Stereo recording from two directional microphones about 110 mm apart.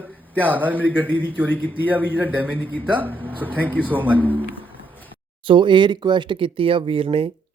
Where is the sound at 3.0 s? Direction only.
15° right (ahead or behind).